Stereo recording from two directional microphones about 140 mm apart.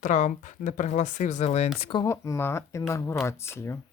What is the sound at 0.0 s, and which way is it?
Speech, 65° left (ahead or behind).